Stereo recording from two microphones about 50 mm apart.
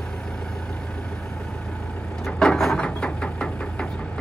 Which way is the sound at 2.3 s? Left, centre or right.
Centre.